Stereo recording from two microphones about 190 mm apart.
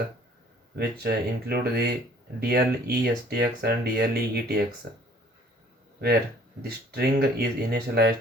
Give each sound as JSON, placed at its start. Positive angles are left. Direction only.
{"t": 0.8, "sound": "speech", "side_deg": -55}
{"t": 6.6, "sound": "speech", "side_deg": -55}